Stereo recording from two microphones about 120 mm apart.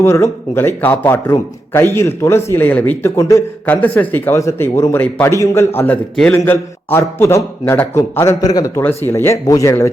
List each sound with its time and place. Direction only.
0.0 s a man's voice: 20° left (ahead or behind)
3.2 s a man's voice: 25° left (ahead or behind)
3.8 s a man's voice: 15° left (ahead or behind); by 8.8 s 30° left (ahead or behind)
9.0 s a man's voice: 20° left (ahead or behind)